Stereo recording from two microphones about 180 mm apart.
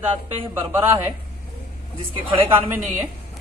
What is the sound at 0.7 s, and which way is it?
Speech, 15° right (ahead or behind).